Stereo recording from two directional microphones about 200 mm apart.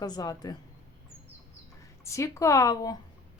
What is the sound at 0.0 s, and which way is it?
Speech, 20° left (ahead or behind).